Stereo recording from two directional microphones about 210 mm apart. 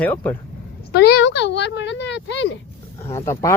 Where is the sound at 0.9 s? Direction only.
50° left (ahead or behind).